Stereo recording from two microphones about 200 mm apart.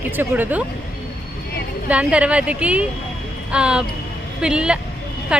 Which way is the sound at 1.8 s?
5° right (ahead or behind).